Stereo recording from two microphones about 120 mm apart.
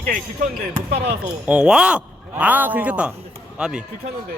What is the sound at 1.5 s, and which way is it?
A man's voice, 5° right (ahead or behind).